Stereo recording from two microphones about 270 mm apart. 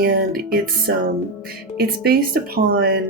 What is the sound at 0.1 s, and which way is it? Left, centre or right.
Speech, right.